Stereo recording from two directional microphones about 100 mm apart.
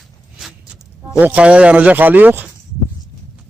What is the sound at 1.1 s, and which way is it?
Speech, 15° right (ahead or behind).